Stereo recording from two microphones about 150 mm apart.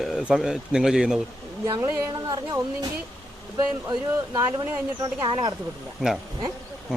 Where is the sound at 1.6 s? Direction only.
25° right (ahead or behind).